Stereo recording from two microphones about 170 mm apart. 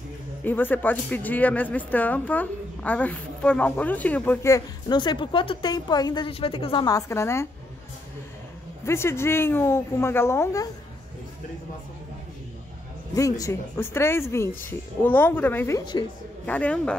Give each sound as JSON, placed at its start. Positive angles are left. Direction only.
{"t": 0.4, "sound": "speech", "side_deg": 10}
{"t": 8.8, "sound": "speech", "side_deg": 15}
{"t": 13.1, "sound": "speech", "side_deg": 20}
{"t": 15.8, "sound": "a woman's voice", "side_deg": 25}
{"t": 16.4, "sound": "speech", "side_deg": 5}